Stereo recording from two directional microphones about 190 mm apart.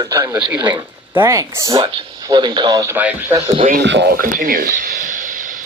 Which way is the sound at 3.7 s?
65° right (ahead or behind).